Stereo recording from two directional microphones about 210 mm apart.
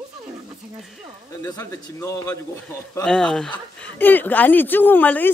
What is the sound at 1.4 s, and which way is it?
Speech, 15° left (ahead or behind).